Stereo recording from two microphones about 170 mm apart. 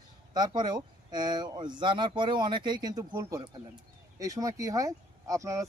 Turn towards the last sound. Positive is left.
turn(degrees=-20)  # may be behind; listen again after turning